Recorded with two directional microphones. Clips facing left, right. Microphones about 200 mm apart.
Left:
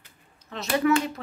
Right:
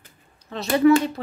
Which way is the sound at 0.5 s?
35° right (ahead or behind).